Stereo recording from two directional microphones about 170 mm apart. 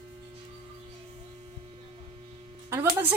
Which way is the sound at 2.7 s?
15° right (ahead or behind).